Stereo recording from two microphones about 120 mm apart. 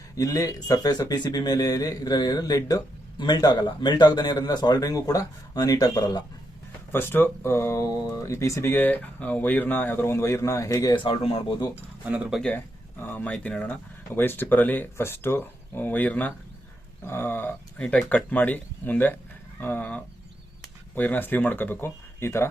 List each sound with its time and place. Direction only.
0.2 s speech: 30° left (ahead or behind)
6.9 s speech: 15° left (ahead or behind)
10.9 s speech: 50° left (ahead or behind)
11.7 s speech: 10° right (ahead or behind)
12.4 s speech: 15° left (ahead or behind)